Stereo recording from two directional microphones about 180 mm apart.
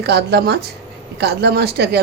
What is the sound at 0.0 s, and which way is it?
A woman's voice, 65° right (ahead or behind).